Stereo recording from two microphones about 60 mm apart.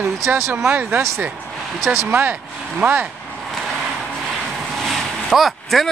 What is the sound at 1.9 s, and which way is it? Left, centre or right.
Speech, right.